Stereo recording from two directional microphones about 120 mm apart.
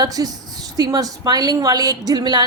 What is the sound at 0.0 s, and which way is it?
A woman's voice, 30° right (ahead or behind).